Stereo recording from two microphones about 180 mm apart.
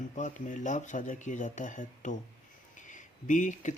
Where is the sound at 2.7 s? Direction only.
45° left (ahead or behind).